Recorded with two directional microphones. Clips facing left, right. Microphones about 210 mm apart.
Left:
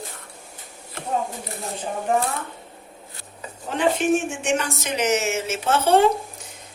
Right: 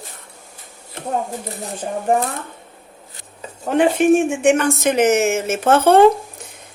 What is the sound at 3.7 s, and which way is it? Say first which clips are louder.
Speech: right 6 dB; 55° right (ahead or behind).